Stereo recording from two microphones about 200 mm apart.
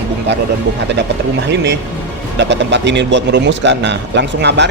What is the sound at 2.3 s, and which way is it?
Speech, 60° right (ahead or behind).